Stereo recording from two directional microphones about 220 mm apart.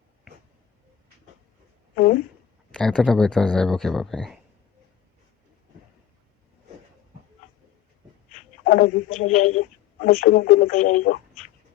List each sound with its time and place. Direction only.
2.7 s speech: 5° left (ahead or behind)
8.6 s a sound: 45° left (ahead or behind)
9.1 s speech: 35° left (ahead or behind)